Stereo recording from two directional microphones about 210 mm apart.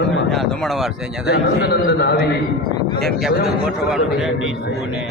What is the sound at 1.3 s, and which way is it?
A man's voice, 50° left (ahead or behind).